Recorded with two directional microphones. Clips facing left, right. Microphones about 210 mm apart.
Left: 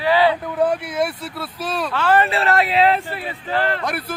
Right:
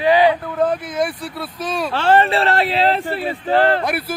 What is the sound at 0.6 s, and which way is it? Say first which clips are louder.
Speech: left 1 dB; 10° left (ahead or behind).